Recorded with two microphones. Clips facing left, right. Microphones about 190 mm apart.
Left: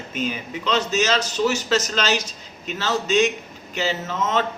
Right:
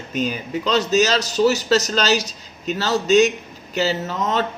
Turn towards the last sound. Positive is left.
turn(degrees=-40)  # may be behind; listen again after turning